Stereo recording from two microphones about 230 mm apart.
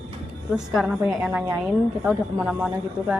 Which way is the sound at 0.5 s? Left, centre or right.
Centre.